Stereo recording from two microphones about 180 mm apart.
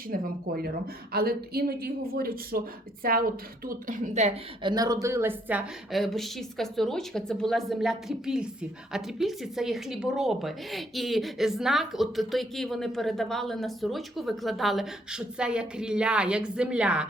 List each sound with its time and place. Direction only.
0.1 s speech: 55° right (ahead or behind)
3.8 s a woman's voice: 45° right (ahead or behind)
4.6 s speech: 20° right (ahead or behind); by 17.1 s 5° right (ahead or behind)